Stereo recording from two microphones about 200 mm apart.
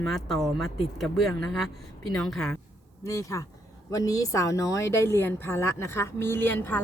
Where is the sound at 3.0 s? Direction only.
15° left (ahead or behind).